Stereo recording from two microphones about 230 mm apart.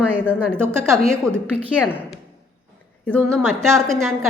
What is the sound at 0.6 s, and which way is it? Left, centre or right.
Speech, centre.